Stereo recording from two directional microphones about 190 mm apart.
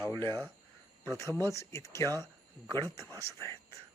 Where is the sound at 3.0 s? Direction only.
15° right (ahead or behind).